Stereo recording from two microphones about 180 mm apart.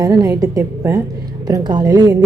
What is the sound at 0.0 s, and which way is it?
A woman's voice, 20° right (ahead or behind).